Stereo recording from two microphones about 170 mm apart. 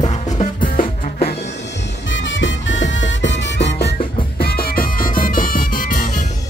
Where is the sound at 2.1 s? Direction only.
90° left.